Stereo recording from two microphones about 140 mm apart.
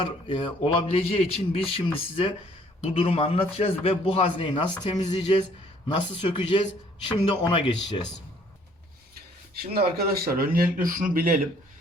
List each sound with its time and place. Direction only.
0.0 s a man's voice: 40° left (ahead or behind)
9.7 s speech: 90° right